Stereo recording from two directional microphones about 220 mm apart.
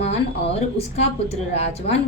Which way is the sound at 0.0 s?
30° left (ahead or behind).